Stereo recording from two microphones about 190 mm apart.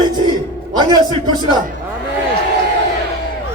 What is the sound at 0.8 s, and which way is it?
Speech, 20° right (ahead or behind).